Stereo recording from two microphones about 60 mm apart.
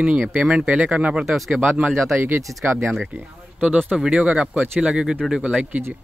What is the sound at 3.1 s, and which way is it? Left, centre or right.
Speech, right.